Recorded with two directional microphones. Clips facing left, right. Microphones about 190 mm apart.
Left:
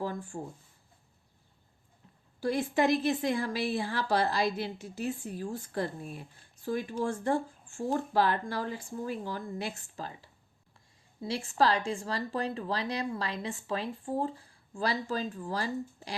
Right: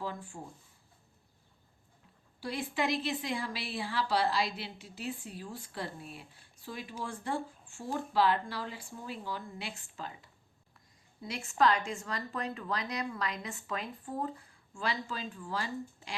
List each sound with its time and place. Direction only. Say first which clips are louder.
0.0 s speech: left 4 dB; 45° left (ahead or behind)
2.4 s speech: left 7 dB; 45° left (ahead or behind)